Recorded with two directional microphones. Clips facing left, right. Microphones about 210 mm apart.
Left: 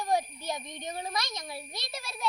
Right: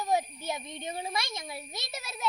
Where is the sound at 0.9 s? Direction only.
5° right (ahead or behind).